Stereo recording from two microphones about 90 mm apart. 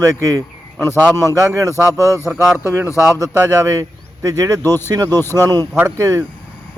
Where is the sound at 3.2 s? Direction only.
35° right (ahead or behind).